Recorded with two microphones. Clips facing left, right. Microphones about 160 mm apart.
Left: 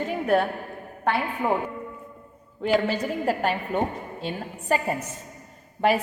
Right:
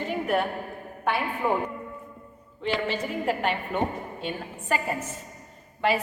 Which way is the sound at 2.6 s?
45° left (ahead or behind).